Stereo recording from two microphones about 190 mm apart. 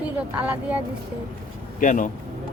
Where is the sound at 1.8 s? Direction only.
45° left (ahead or behind).